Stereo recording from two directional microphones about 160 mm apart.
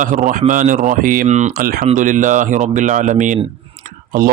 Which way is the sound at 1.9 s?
55° right (ahead or behind).